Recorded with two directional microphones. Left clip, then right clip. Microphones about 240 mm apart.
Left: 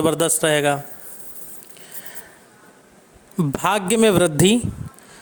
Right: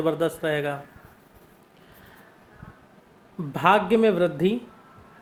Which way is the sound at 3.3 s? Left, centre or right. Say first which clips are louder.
Right 1 dB; left.